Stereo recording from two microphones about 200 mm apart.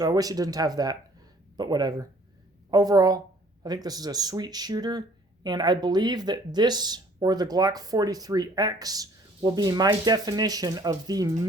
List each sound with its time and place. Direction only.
0.0 s speech: 20° right (ahead or behind)